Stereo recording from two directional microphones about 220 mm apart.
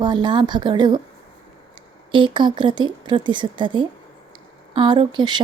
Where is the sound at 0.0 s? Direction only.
20° right (ahead or behind).